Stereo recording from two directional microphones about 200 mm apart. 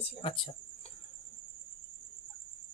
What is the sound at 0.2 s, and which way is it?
Speech, 25° left (ahead or behind).